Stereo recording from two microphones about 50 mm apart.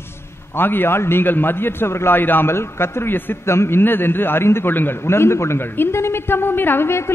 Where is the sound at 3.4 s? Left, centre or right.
Left.